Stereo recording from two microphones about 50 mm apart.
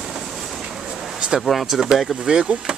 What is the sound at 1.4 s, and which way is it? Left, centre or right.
Speech, centre.